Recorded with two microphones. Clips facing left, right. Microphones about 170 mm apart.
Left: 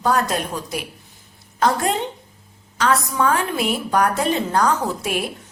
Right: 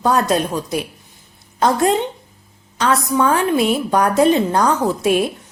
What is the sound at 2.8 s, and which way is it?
A woman's voice, 20° right (ahead or behind).